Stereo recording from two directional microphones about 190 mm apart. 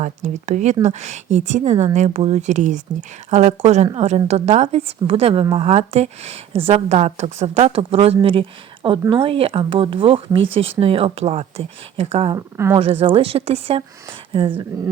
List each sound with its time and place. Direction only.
0.0 s speech: 40° right (ahead or behind)
12.5 s a woman's voice: 15° right (ahead or behind)
12.8 s speech: 30° right (ahead or behind)